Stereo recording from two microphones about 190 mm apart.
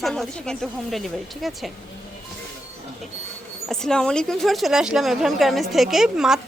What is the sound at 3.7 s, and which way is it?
Speech, 5° left (ahead or behind).